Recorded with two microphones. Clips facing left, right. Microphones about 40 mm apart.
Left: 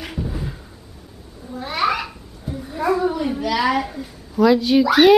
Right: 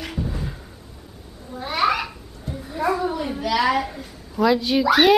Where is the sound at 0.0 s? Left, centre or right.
Centre.